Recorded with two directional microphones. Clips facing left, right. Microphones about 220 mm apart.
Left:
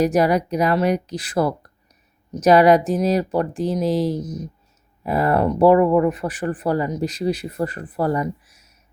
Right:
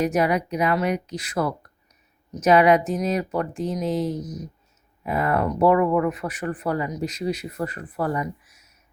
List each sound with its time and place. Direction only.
0.0 s speech: 35° left (ahead or behind)